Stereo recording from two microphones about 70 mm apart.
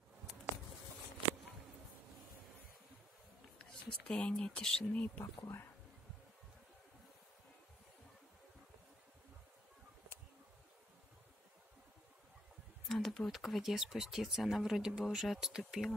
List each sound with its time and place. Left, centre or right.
4.1 s speech: centre
4.9 s speech: left
5.2 s speech: left
12.8 s speech: centre